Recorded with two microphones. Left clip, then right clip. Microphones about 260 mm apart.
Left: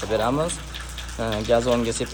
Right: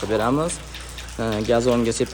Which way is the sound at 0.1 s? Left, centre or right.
Right.